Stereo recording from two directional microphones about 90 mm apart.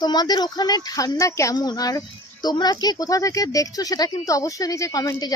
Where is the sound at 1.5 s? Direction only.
50° left (ahead or behind).